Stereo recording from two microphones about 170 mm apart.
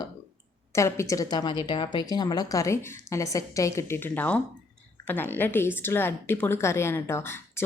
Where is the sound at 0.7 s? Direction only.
15° left (ahead or behind).